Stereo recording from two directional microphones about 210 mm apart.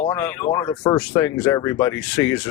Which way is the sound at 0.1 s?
10° left (ahead or behind).